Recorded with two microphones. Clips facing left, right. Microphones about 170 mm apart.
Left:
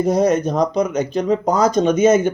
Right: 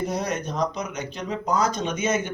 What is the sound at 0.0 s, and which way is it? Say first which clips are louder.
Speech: left 11 dB; 45° left (ahead or behind).